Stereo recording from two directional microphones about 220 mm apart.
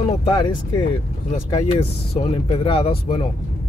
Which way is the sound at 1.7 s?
25° left (ahead or behind).